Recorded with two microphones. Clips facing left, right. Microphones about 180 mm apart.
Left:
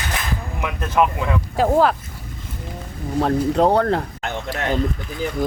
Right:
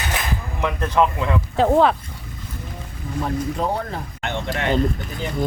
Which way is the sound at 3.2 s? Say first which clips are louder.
Left 7 dB; 75° left (ahead or behind).